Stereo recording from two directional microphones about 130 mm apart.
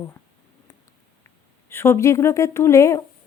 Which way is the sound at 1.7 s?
20° left (ahead or behind).